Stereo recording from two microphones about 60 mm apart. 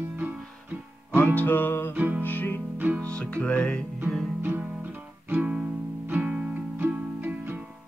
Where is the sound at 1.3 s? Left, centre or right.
Left.